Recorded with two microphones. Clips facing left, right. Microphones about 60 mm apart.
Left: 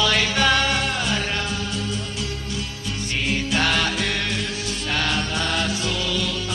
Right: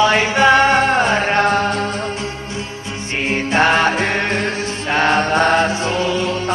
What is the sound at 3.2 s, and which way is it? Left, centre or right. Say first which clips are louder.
Music: right 8 dB; right.